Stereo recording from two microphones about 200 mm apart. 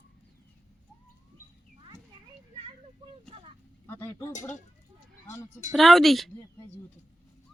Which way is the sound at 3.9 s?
10° left (ahead or behind).